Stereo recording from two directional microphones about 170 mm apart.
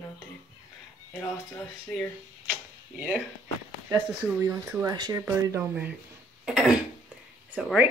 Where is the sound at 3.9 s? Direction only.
15° right (ahead or behind).